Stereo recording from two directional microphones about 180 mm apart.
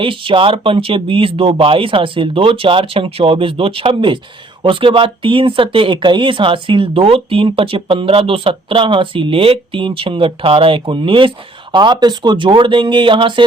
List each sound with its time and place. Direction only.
0.0 s speech: 30° right (ahead or behind)